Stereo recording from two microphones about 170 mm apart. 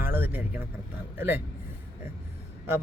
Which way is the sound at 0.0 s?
10° right (ahead or behind).